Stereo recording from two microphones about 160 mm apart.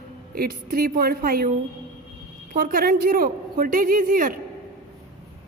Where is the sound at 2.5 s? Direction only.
65° right (ahead or behind).